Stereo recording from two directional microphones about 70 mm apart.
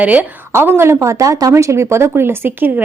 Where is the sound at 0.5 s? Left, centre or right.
Right.